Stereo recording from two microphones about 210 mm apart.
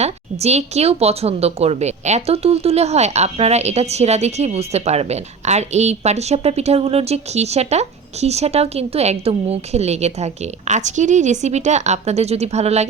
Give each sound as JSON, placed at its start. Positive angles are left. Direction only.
{"t": 0.0, "sound": "a woman's voice", "side_deg": -30}